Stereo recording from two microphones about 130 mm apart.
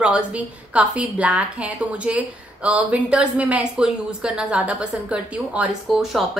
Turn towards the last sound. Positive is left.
turn(degrees=0)  # may be behind; listen again after turning